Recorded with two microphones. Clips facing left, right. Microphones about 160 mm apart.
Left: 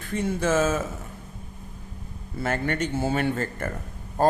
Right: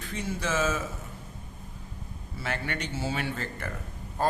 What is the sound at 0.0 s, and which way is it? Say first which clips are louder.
Speech: left 7 dB; 50° left (ahead or behind).